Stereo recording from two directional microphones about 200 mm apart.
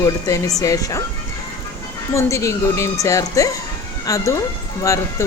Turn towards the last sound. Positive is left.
turn(degrees=15)  # may be behind; listen again after turning